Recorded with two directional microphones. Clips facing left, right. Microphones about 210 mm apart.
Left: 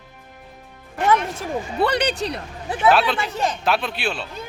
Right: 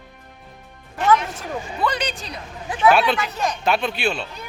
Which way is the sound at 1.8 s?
65° left (ahead or behind).